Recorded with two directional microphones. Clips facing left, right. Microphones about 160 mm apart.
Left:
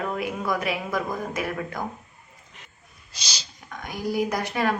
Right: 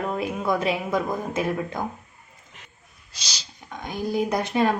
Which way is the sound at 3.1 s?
15° left (ahead or behind).